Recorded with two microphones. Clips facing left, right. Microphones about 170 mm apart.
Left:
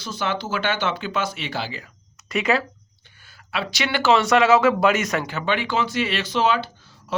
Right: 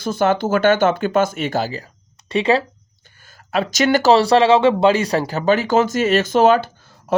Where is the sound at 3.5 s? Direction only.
45° right (ahead or behind).